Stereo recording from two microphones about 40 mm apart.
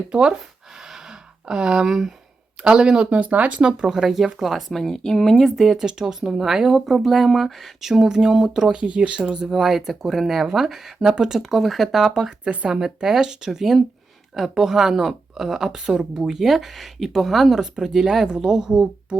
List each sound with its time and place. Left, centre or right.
0.1 s speech: right
0.8 s a sound: centre
1.9 s a woman's voice: centre
3.2 s speech: right
3.6 s speech: right
3.8 s a woman's voice: centre
4.7 s speech: centre
5.5 s speech: centre
5.7 s a woman's voice: centre
6.7 s speech: centre
8.7 s speech: right
9.5 s a woman's voice: centre
12.0 s a woman's voice: centre